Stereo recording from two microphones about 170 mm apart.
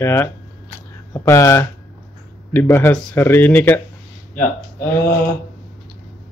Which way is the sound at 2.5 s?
10° left (ahead or behind).